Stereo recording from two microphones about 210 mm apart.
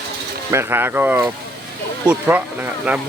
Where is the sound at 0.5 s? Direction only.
10° right (ahead or behind).